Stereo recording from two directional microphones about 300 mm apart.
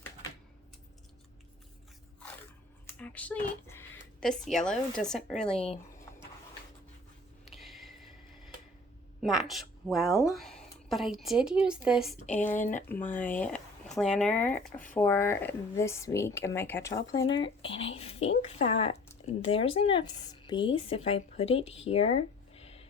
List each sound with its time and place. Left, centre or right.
2.8 s speech: centre
7.5 s a sound: centre
9.2 s a woman's voice: centre